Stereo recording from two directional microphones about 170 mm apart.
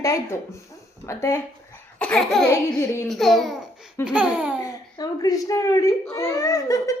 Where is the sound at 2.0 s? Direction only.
5° left (ahead or behind).